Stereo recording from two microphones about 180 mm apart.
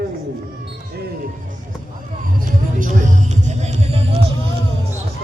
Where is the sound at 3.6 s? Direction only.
35° right (ahead or behind).